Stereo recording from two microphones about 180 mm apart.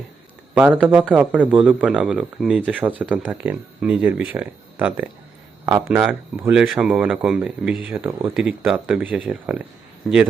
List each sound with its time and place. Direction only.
0.5 s speech: 5° right (ahead or behind)